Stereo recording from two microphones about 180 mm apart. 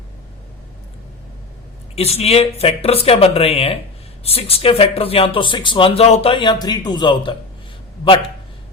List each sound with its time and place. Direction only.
2.0 s speech: 35° left (ahead or behind)